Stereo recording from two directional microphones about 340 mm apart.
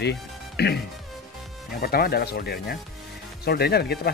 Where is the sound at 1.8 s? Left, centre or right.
Left.